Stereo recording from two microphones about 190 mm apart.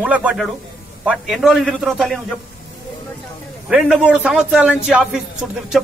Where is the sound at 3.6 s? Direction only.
5° right (ahead or behind).